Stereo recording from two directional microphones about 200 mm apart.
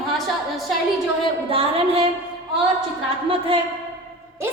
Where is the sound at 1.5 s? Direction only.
30° right (ahead or behind).